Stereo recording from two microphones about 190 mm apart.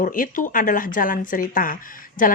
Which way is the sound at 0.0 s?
45° left (ahead or behind).